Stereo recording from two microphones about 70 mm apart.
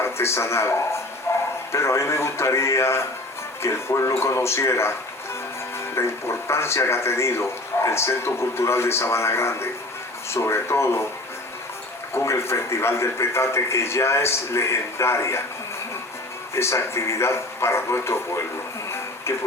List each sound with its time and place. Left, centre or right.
0.0 s speech: left
1.3 s bow-wow: left
1.7 s speech: left
12.1 s speech: left
16.6 s speech: left